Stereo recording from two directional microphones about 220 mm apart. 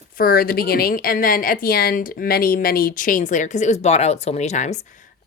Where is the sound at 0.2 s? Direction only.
40° left (ahead or behind).